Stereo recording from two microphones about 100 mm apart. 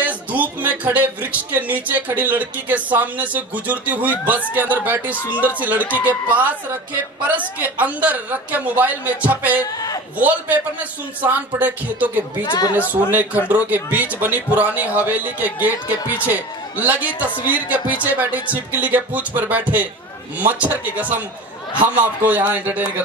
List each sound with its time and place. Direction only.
0.0 s speech: 15° right (ahead or behind)
7.8 s speech: 15° right (ahead or behind)
12.4 s a woman's voice: 45° left (ahead or behind)
12.7 s speech: 15° right (ahead or behind)